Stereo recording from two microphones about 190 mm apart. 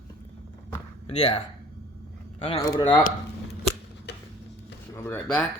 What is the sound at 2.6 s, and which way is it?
Speech, 25° left (ahead or behind).